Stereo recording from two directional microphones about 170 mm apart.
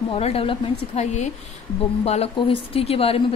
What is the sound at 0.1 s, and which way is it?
Speech, 35° left (ahead or behind).